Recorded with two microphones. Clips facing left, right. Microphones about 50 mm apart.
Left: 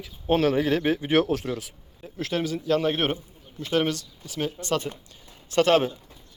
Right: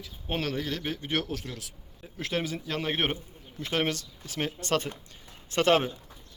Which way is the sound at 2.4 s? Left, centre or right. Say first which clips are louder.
Left 8 dB; right.